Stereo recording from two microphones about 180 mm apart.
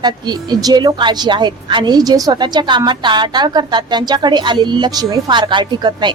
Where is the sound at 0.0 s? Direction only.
25° right (ahead or behind).